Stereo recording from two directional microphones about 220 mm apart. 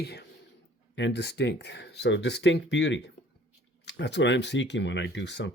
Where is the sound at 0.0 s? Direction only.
45° left (ahead or behind).